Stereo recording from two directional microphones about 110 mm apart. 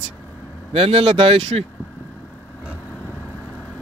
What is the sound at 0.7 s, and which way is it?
Speech, 60° right (ahead or behind).